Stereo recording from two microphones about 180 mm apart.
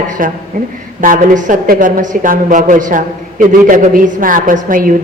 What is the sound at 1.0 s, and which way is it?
A woman's voice, 45° right (ahead or behind).